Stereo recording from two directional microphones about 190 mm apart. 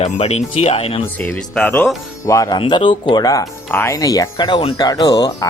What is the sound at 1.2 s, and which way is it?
Speech, 5° left (ahead or behind).